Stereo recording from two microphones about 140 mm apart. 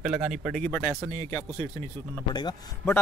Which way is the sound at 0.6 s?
10° left (ahead or behind).